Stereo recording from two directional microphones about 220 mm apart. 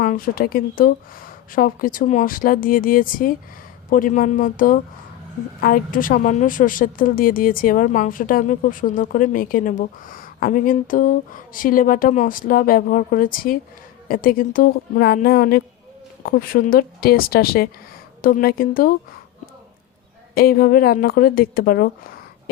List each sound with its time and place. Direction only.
0.0 s a woman's voice: 40° left (ahead or behind)
20.3 s a woman's voice: 45° left (ahead or behind)